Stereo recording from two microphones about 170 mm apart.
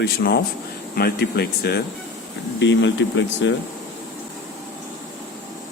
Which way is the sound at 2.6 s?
90° left.